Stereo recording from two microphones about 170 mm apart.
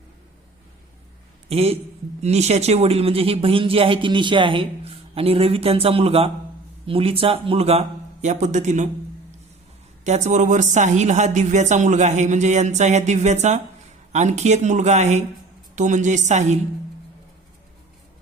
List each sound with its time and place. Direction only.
1.5 s speech: 35° right (ahead or behind)
10.0 s speech: 45° right (ahead or behind)